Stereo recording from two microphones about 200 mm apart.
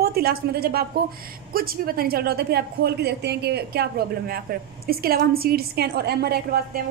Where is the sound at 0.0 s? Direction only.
50° right (ahead or behind).